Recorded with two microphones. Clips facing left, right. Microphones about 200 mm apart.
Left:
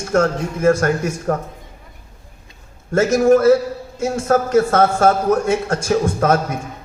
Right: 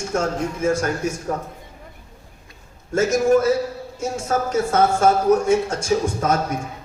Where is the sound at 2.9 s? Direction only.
70° left (ahead or behind).